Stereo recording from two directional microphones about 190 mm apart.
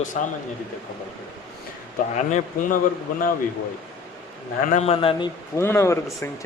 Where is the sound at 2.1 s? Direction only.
40° left (ahead or behind).